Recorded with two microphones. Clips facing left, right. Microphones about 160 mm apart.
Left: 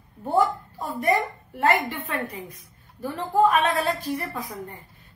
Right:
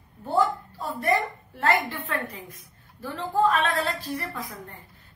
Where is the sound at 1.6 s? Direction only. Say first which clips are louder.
Left 2 dB; 20° left (ahead or behind).